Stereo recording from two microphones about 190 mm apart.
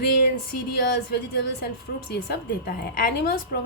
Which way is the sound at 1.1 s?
55° left (ahead or behind).